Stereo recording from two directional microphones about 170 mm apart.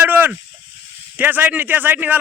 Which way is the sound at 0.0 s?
10° right (ahead or behind).